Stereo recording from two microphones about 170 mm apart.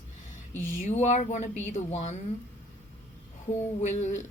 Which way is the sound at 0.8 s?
40° left (ahead or behind).